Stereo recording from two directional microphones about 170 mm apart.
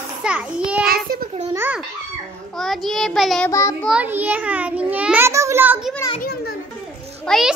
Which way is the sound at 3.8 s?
5° right (ahead or behind).